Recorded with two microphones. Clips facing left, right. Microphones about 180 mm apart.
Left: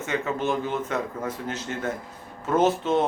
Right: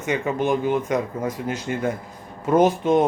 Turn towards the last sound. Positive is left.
turn(degrees=-15)  # may be behind; listen again after turning